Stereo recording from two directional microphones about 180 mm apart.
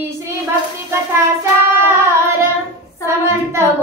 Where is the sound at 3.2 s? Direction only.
15° right (ahead or behind).